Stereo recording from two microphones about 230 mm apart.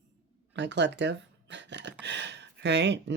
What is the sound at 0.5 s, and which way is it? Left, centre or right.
Speech, right.